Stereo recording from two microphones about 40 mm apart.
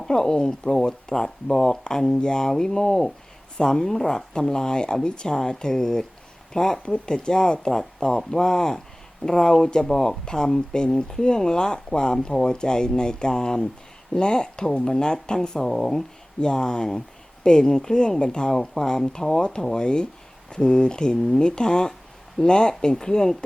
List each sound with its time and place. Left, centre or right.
0.0 s speech: centre
16.4 s speech: left
21.2 s speech: centre
21.4 s speech: centre